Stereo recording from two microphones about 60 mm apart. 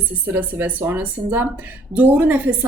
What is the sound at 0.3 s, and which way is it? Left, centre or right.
A woman's voice, right.